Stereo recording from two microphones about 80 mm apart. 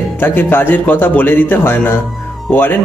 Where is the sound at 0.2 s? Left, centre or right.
Left.